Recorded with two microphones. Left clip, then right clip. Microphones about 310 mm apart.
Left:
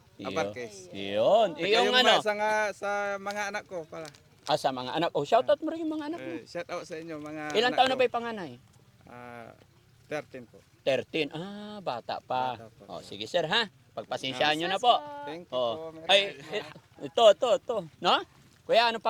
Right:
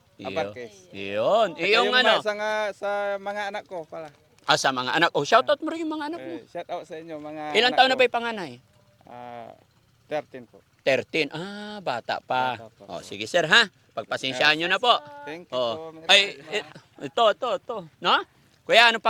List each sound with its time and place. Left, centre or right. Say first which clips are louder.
0.2 s a man's voice: right 2 dB; centre
0.9 s a man's voice: right 2 dB; centre
2.2 s a man's voice: right 1 dB; right
4.4 s a man's voice: right 6 dB; right
4.7 s a man's voice: right 7 dB; right
6.1 s a man's voice: right 2 dB; centre; by 15.8 s right
15.8 s a man's voice: right 2 dB; right
16.0 s a man's voice: right 5 dB; right
17.2 s a man's voice: left 1 dB; centre
18.6 s a man's voice: right 7 dB; right